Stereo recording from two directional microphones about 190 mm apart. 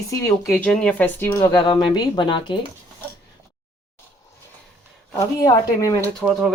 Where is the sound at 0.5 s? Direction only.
5° left (ahead or behind); by 2.6 s 25° left (ahead or behind).